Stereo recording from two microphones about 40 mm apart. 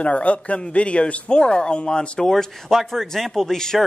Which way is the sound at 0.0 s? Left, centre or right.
Left.